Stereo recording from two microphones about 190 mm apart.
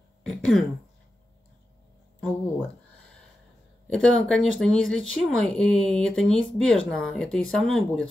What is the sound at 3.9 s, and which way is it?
Speech, 5° left (ahead or behind).